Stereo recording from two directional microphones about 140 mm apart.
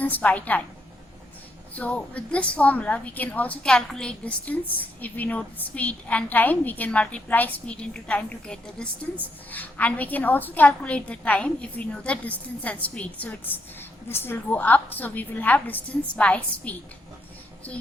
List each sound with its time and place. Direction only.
0.0 s a woman's voice: 10° left (ahead or behind)
1.7 s a woman's voice: 10° left (ahead or behind)